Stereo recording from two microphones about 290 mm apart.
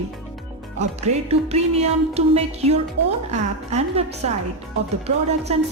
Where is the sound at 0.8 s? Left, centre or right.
Right.